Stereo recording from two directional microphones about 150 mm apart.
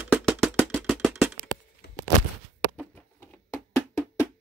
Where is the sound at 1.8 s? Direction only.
90° left.